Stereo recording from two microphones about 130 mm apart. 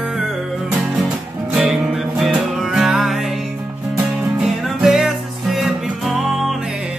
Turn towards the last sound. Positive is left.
turn(degrees=0)  # may be behind; listen again after turning